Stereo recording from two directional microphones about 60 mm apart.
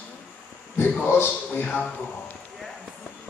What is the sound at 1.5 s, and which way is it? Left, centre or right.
Speech, left.